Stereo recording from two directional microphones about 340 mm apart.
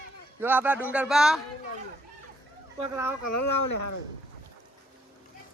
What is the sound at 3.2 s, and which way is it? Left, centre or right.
Speech, left.